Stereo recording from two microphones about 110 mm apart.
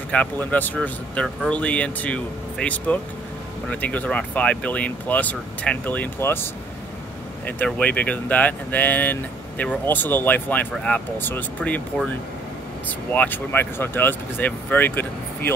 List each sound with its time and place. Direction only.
0.1 s speech: 15° left (ahead or behind)
12.8 s speech: 15° left (ahead or behind)